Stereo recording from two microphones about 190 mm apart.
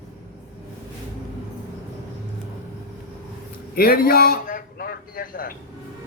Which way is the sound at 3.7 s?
50° left (ahead or behind).